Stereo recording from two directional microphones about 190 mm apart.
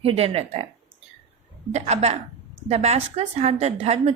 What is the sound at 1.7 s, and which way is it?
A woman's voice, 35° right (ahead or behind).